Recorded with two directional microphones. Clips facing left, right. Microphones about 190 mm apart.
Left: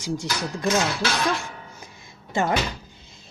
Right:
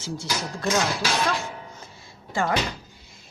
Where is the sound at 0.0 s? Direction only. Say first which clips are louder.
Left 3 dB; 15° left (ahead or behind).